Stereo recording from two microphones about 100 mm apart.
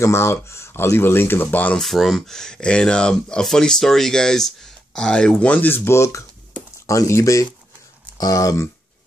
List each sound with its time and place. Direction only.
0.0 s speech: 25° left (ahead or behind)
1.8 s speech: centre (ahead or behind); by 8.6 s 35° left (ahead or behind)